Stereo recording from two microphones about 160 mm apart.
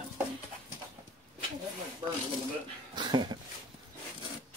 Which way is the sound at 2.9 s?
30° right (ahead or behind).